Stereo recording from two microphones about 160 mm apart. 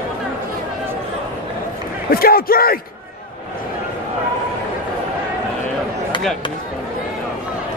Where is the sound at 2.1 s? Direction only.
70° left (ahead or behind).